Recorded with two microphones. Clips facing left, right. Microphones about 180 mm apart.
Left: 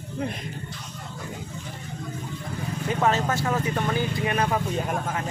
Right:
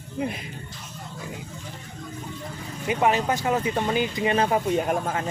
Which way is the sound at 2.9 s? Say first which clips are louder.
Right 2 dB; 15° right (ahead or behind).